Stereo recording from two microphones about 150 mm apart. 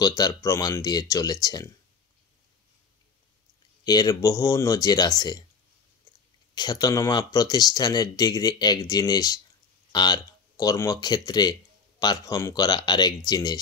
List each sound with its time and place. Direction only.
0.0 s speech: 25° left (ahead or behind)
3.8 s speech: 25° left (ahead or behind)
6.5 s speech: 30° left (ahead or behind)